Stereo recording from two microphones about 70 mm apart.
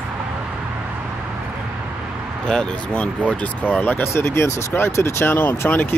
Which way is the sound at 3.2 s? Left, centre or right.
Left.